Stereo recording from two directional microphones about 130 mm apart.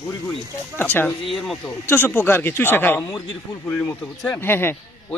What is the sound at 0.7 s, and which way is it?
Speech, 15° left (ahead or behind).